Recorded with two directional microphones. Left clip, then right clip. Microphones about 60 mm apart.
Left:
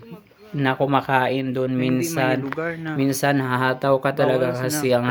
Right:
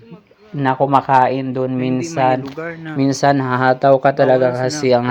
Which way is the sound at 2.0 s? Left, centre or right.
Centre.